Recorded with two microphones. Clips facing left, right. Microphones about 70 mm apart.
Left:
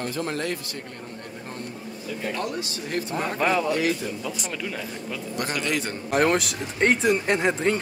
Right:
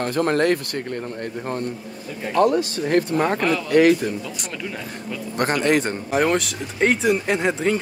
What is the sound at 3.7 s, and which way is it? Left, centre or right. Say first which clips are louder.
Speech: right 9 dB; right.